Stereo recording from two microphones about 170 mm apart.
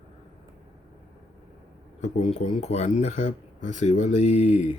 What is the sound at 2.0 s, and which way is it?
Speech, 40° left (ahead or behind).